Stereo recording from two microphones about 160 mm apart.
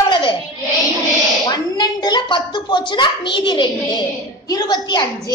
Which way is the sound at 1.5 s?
25° left (ahead or behind).